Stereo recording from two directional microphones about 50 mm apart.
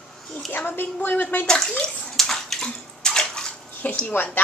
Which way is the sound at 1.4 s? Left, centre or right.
Centre.